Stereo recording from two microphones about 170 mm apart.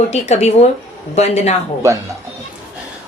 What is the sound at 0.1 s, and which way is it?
Speech, 40° left (ahead or behind).